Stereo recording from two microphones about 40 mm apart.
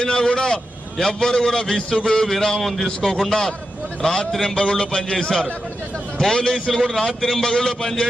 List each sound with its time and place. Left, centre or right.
0.0 s a man's voice: centre
6.1 s a man's voice: centre